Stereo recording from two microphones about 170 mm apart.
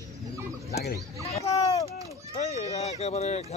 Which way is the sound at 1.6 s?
20° left (ahead or behind).